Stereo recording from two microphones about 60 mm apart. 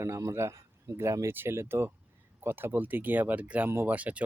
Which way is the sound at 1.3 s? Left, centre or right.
Right.